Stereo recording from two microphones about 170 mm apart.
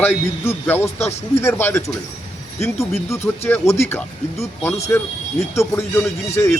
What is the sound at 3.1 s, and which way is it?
Speech, 15° left (ahead or behind).